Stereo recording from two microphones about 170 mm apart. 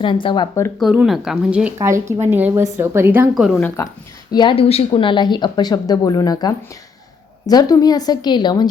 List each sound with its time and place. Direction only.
0.0 s speech: 30° left (ahead or behind)
0.8 s speech: 5° right (ahead or behind)
3.3 s speech: centre (ahead or behind)
4.3 s speech: 25° left (ahead or behind)